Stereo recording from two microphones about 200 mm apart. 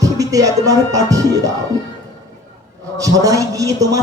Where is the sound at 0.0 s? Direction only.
15° right (ahead or behind).